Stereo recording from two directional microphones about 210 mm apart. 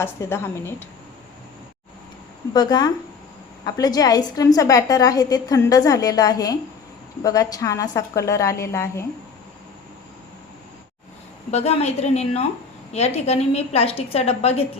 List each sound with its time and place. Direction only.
0.0 s a woman's voice: 10° left (ahead or behind)
2.5 s a woman's voice: 20° left (ahead or behind)
11.5 s a woman's voice: 30° left (ahead or behind)